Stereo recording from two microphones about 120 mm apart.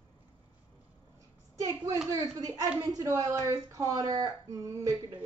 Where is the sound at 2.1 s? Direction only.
30° right (ahead or behind).